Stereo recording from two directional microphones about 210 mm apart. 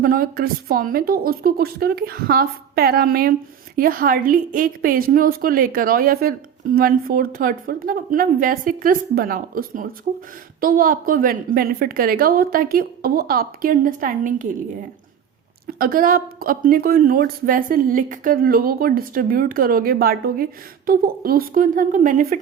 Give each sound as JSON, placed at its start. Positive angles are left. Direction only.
{"t": 0.0, "sound": "speech", "side_deg": -45}
{"t": 15.6, "sound": "speech", "side_deg": -45}